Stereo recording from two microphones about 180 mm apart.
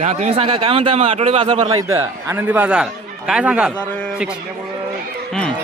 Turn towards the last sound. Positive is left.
turn(degrees=5)  # may be behind; listen again after turning